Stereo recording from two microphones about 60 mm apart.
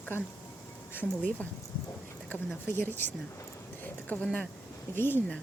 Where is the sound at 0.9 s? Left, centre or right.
Left.